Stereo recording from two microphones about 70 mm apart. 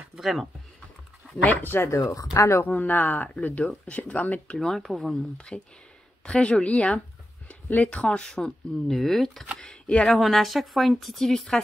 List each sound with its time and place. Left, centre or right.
0.1 s speech: centre
1.4 s speech: left
2.3 s speech: left
2.6 s speech: left
4.6 s speech: centre
9.6 s speech: centre